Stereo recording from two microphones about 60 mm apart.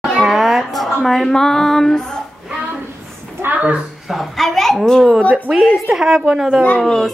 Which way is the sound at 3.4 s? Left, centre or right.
Right.